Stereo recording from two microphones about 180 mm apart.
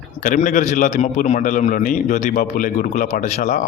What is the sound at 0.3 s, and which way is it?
A man's voice, 45° left (ahead or behind).